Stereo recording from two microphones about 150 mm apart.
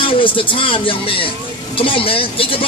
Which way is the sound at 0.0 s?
35° left (ahead or behind).